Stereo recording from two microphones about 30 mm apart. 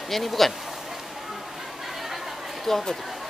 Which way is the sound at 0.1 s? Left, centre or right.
Centre.